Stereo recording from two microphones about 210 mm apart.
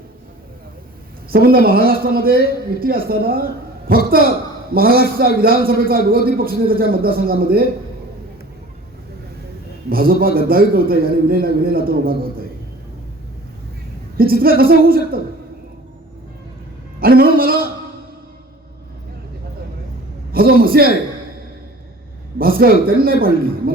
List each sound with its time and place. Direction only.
1.3 s a man's voice: 45° right (ahead or behind)
9.9 s a man's voice: 45° right (ahead or behind)
14.2 s a man's voice: 45° right (ahead or behind)
17.0 s a man's voice: 45° right (ahead or behind)
20.3 s a man's voice: 45° right (ahead or behind)
22.4 s speech: 45° right (ahead or behind)